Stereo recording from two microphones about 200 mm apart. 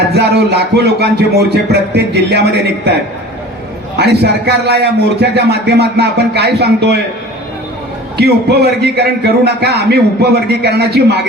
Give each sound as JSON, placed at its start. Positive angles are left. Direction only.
{"t": 0.1, "sound": "a man's voice", "side_deg": -55}
{"t": 8.2, "sound": "a man's voice", "side_deg": -55}